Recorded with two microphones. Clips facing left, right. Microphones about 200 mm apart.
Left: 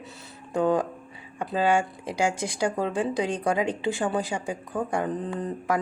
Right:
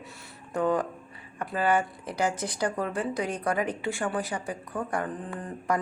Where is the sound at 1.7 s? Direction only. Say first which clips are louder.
Even; 10° left (ahead or behind).